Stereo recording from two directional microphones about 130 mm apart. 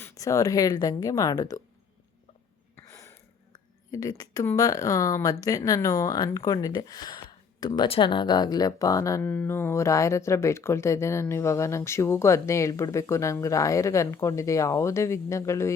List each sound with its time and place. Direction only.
0.0 s speech: 25° left (ahead or behind)
2.7 s a sound: 20° left (ahead or behind)
4.2 s speech: 25° left (ahead or behind)
9.2 s speech: 15° left (ahead or behind)